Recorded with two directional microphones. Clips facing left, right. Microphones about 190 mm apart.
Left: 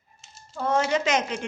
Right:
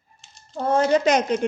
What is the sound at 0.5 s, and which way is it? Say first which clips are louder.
Speech: right 5 dB; 30° right (ahead or behind).